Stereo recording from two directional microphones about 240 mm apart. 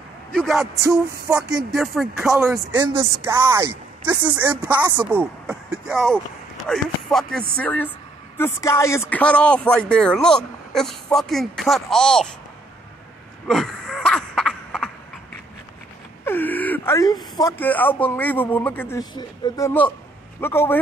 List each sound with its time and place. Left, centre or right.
0.3 s speech: centre
2.8 s speech: centre
3.3 s a man's voice: centre
13.5 s a sound: centre
16.3 s wail: centre
17.4 s a man's voice: centre